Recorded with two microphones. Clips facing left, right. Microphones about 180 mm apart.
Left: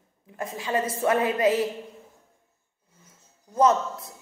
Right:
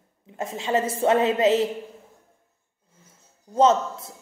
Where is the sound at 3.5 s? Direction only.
25° right (ahead or behind).